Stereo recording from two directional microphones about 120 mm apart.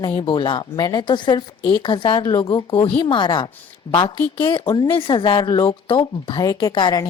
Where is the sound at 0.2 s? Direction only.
45° left (ahead or behind).